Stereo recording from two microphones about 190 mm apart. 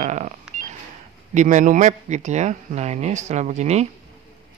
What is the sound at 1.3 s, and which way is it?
Speech, 40° right (ahead or behind).